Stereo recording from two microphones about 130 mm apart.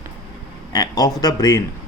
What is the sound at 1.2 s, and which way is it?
Speech, 30° left (ahead or behind).